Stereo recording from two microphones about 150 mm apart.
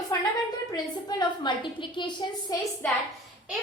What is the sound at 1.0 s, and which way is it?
A woman's voice, 30° left (ahead or behind).